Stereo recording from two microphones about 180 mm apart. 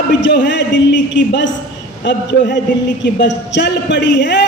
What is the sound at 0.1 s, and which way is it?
Speech, 80° left.